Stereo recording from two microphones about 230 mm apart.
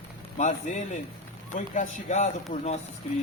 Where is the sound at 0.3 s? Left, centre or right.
Left.